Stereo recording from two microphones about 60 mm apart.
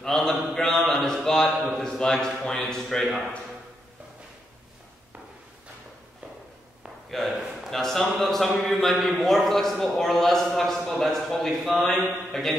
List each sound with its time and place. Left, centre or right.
0.0 s speech: centre
3.1 s a man's voice: centre
7.1 s a sound: centre
7.7 s a man's voice: centre
9.2 s a sound: centre
9.9 s a man's voice: centre